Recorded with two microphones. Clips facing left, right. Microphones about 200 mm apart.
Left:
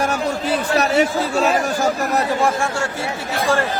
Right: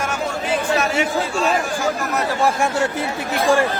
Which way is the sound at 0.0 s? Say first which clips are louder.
Left 3 dB; 35° left (ahead or behind).